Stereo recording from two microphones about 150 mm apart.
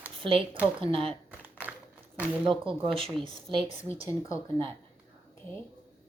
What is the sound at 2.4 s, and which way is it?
Speech, 35° right (ahead or behind).